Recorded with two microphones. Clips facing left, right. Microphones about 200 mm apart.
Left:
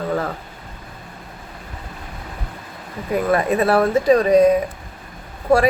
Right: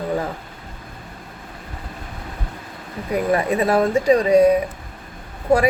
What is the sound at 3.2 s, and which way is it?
Speech, 15° right (ahead or behind).